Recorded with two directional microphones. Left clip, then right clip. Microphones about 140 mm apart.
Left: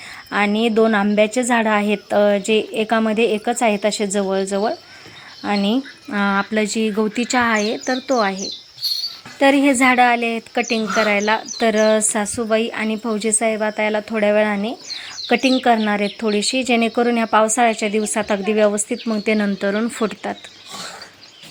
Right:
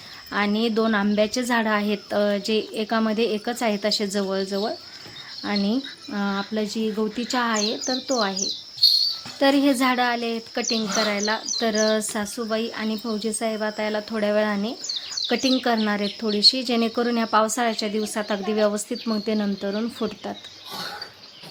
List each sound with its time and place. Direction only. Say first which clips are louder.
0.3 s speech: left 5 dB; 20° left (ahead or behind)
6.1 s speech: left 10 dB; 40° left (ahead or behind)
7.2 s speech: left 7 dB; 25° left (ahead or behind)
10.9 s speech: left 8 dB; 30° left (ahead or behind)
19.5 s speech: left 7 dB; 45° left (ahead or behind)
19.8 s speech: left 6 dB; 25° left (ahead or behind)